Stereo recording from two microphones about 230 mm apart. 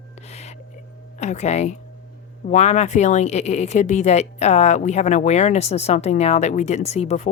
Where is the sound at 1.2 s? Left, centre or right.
Left.